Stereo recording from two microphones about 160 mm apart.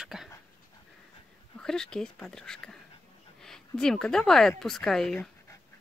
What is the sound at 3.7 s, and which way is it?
Speech, 5° left (ahead or behind).